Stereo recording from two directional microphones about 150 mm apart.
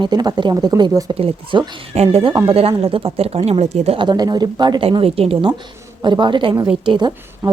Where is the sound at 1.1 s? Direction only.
35° right (ahead or behind).